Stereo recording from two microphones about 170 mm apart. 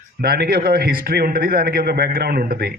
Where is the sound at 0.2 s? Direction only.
65° right (ahead or behind).